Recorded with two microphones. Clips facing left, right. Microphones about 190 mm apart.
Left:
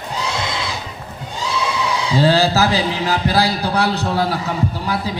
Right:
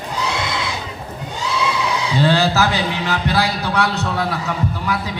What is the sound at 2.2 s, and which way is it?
A man's voice, 35° left (ahead or behind).